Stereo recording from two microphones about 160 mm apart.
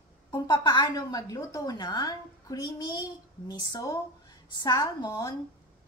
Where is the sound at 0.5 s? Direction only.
25° left (ahead or behind).